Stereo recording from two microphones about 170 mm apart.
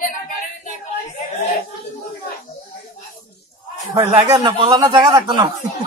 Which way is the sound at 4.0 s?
25° right (ahead or behind).